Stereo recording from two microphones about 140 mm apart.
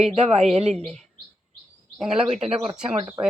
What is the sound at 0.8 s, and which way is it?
Speech, 5° left (ahead or behind).